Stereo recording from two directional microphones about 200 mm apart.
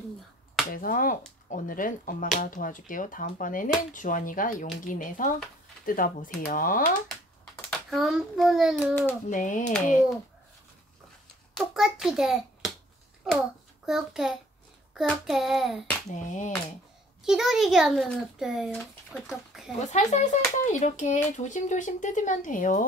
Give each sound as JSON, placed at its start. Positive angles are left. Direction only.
{"t": 0.7, "sound": "speech", "side_deg": 45}
{"t": 7.7, "sound": "a child's voice", "side_deg": 0}
{"t": 9.3, "sound": "speech", "side_deg": 40}
{"t": 11.5, "sound": "hands", "side_deg": 0}
{"t": 13.8, "sound": "a child's voice", "side_deg": 0}
{"t": 16.1, "sound": "speech", "side_deg": 40}
{"t": 17.2, "sound": "a child's voice", "side_deg": 0}
{"t": 19.9, "sound": "speech", "side_deg": 35}